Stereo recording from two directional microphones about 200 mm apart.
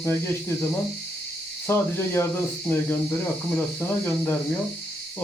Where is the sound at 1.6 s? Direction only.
10° left (ahead or behind).